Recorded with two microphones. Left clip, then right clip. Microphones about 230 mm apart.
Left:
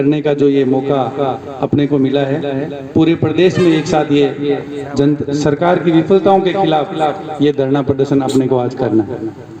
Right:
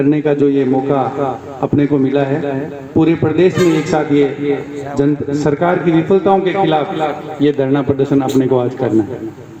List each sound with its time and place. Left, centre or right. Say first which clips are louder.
0.1 s a man's voice: left 2 dB; left